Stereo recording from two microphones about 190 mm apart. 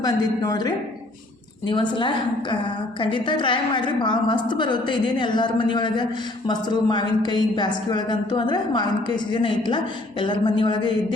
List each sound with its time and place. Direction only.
0.0 s a woman's voice: 20° left (ahead or behind)